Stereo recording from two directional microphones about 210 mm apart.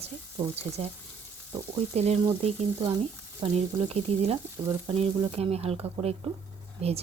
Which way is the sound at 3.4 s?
30° right (ahead or behind).